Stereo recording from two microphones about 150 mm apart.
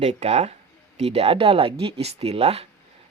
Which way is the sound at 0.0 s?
45° right (ahead or behind).